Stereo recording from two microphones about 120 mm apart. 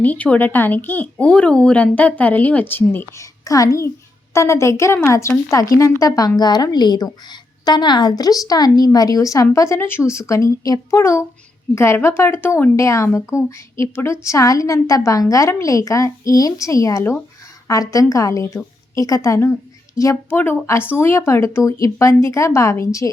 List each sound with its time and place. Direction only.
0.0 s speech: 10° left (ahead or behind)
3.4 s a woman's voice: 30° left (ahead or behind)